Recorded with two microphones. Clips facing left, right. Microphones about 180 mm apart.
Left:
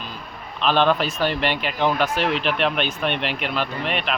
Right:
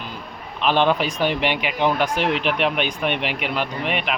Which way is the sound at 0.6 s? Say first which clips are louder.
Even; 15° right (ahead or behind).